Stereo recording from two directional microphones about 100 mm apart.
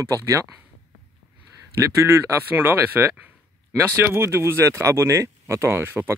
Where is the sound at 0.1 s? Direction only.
30° right (ahead or behind).